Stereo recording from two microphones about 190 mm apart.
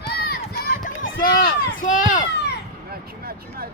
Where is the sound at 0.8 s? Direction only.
45° left (ahead or behind).